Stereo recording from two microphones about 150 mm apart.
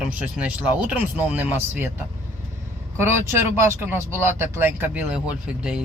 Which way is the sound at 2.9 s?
15° right (ahead or behind).